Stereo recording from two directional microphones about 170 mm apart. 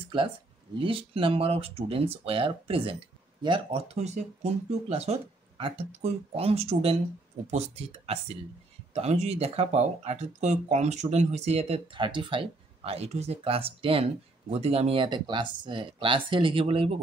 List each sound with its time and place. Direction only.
0.7 s speech: 30° right (ahead or behind)